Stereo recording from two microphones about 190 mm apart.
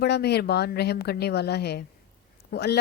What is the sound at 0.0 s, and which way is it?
Speech, 60° left (ahead or behind).